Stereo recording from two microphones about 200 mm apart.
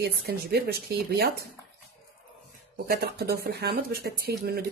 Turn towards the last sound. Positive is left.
turn(degrees=-50)  # may be behind; listen again after turning